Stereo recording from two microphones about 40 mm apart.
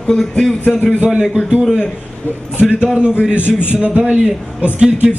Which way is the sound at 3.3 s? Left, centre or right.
Left.